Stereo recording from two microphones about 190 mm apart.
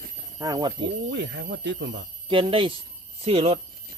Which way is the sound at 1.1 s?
65° right (ahead or behind).